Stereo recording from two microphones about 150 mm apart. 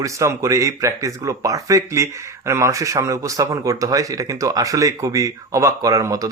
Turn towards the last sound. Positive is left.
turn(degrees=-20)  # may be behind; listen again after turning